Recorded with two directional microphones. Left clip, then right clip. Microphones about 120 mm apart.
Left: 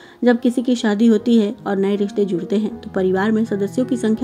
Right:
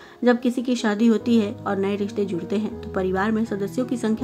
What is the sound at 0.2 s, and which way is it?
A woman's voice, 25° left (ahead or behind).